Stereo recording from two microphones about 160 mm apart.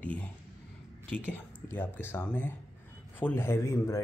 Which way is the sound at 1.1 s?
10° left (ahead or behind).